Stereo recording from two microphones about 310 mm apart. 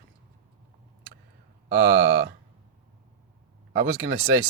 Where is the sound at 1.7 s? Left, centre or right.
Right.